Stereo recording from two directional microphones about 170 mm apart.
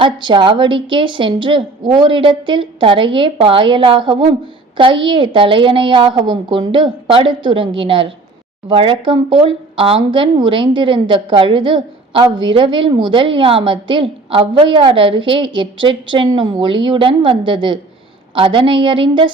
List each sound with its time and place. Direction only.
0.0 s speech: 30° right (ahead or behind)